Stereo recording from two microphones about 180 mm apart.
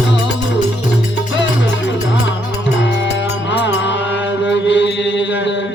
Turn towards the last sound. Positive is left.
turn(degrees=85)